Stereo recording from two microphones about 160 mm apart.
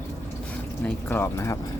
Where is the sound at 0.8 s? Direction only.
10° left (ahead or behind).